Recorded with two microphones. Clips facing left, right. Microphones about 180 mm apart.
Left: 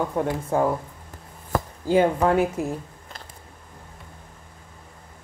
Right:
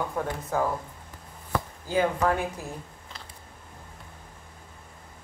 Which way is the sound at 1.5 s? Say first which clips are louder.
Left 4 dB; 45° left (ahead or behind).